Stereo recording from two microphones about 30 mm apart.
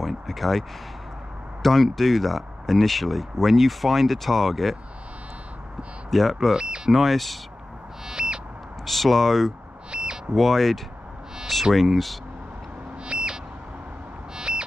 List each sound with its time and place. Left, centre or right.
0.3 s speech: centre
6.0 s speech: centre
6.5 s speech: right
6.9 s speech: centre
8.1 s owl: right
8.8 s speech: centre
9.9 s a sound: right
10.3 s speech: centre
13.0 s vehicle: right
14.3 s a sound: right